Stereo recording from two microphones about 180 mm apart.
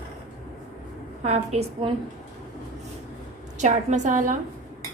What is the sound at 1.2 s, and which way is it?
Speech, 35° right (ahead or behind).